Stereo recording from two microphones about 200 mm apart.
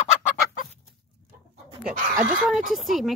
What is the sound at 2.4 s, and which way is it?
Speech, centre (ahead or behind).